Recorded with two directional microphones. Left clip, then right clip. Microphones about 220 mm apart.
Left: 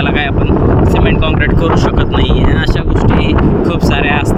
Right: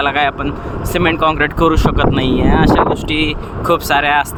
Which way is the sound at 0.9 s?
25° right (ahead or behind).